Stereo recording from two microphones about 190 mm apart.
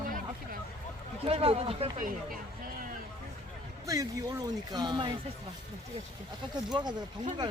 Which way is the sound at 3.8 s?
20° right (ahead or behind).